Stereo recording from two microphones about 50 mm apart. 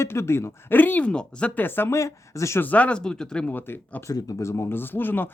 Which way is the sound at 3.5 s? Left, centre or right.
Left.